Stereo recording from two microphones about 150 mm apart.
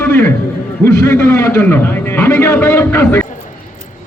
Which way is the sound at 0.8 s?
20° left (ahead or behind).